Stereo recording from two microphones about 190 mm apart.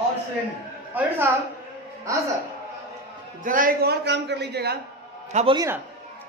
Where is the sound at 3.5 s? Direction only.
45° right (ahead or behind).